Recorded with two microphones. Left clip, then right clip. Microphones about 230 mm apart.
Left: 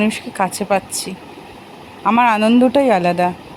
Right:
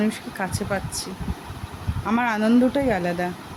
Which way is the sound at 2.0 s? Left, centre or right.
Centre.